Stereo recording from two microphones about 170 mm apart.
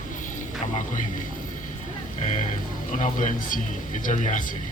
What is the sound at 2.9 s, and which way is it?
A man's voice, 45° left (ahead or behind).